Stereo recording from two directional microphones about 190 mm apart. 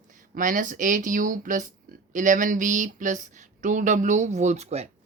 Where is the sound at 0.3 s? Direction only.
45° right (ahead or behind).